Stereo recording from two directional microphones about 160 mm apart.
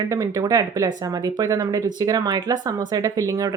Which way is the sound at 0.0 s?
20° right (ahead or behind).